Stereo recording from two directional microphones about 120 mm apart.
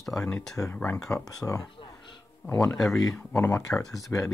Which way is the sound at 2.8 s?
Centre (ahead or behind).